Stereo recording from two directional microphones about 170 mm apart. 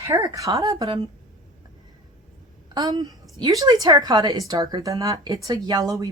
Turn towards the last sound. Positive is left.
turn(degrees=-20)  # may be behind; listen again after turning